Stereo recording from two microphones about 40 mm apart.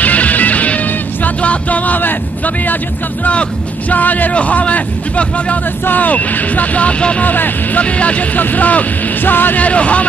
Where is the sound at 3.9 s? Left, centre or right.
Left.